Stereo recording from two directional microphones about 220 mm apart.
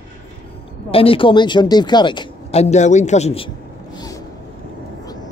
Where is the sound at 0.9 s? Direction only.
25° left (ahead or behind).